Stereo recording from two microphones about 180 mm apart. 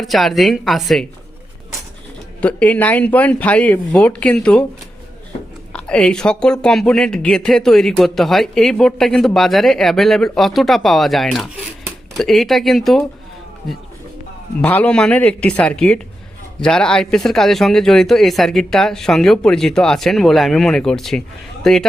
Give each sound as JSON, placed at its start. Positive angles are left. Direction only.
{"t": 0.0, "sound": "speech", "side_deg": 0}
{"t": 2.4, "sound": "speech", "side_deg": 5}
{"t": 5.7, "sound": "speech", "side_deg": 5}
{"t": 14.6, "sound": "speech", "side_deg": 10}